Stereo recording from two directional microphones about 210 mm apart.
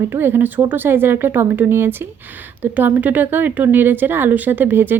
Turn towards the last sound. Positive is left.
turn(degrees=-10)  # may be behind; listen again after turning